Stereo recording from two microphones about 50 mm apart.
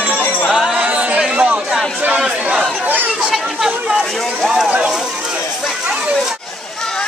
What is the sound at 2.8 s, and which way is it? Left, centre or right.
Chatter, right.